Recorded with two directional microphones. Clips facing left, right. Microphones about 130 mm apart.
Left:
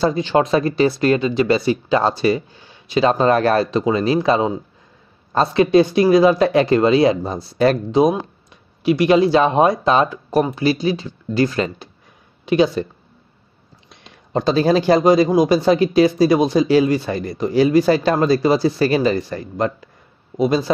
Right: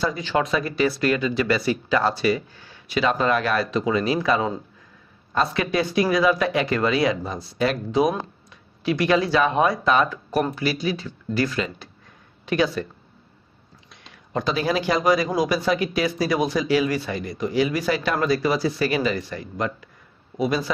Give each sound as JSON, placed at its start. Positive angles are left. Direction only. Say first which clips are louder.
{"t": 0.0, "sound": "speech", "louder": "left 7 dB", "side_deg": 25}
{"t": 3.0, "sound": "speech", "louder": "left 6 dB", "side_deg": 35}
{"t": 8.1, "sound": "speech", "louder": "left 5 dB", "side_deg": 15}
{"t": 13.8, "sound": "speech", "louder": "left 4 dB", "side_deg": 30}